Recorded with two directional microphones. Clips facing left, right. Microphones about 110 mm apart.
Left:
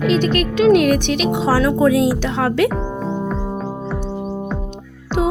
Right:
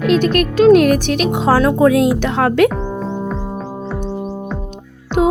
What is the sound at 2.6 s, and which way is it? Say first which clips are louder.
Music: right 2 dB; 5° left (ahead or behind).